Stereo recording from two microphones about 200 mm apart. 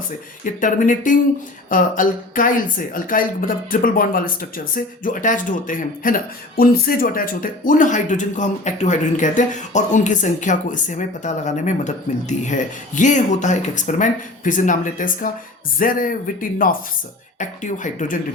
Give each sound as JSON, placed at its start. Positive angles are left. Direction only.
{"t": 0.6, "sound": "speech", "side_deg": 40}